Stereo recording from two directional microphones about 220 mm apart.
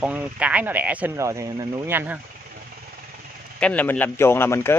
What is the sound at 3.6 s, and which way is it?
Speech, 5° left (ahead or behind).